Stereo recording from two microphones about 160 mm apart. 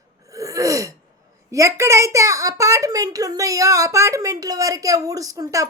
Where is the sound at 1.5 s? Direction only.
20° right (ahead or behind).